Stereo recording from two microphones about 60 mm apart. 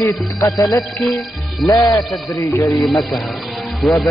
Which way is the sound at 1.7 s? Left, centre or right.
Left.